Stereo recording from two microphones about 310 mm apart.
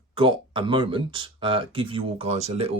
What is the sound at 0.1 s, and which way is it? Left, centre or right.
Speech, centre.